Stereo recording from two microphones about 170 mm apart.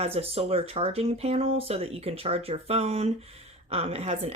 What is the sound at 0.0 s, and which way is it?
Speech, 35° right (ahead or behind).